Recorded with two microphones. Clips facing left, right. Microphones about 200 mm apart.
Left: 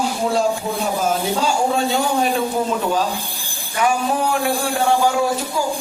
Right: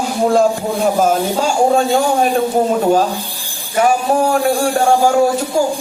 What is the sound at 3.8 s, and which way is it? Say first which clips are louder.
A man's voice: right 5 dB; 45° right (ahead or behind).